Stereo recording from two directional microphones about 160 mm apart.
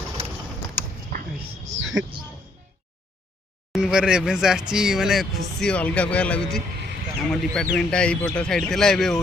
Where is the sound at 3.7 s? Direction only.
5° right (ahead or behind).